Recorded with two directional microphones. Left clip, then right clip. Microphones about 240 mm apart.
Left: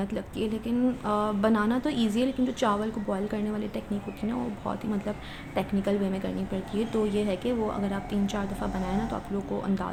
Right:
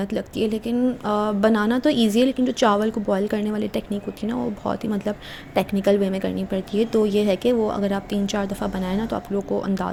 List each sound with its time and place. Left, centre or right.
0.0 s speech: right